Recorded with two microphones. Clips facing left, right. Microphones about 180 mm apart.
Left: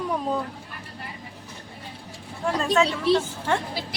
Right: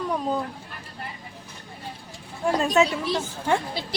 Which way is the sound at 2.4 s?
15° right (ahead or behind).